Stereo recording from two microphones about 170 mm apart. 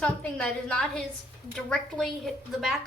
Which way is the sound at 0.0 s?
5° left (ahead or behind).